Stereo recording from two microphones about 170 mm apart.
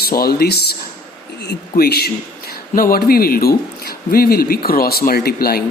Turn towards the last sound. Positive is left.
turn(degrees=65)  # may be behind; listen again after turning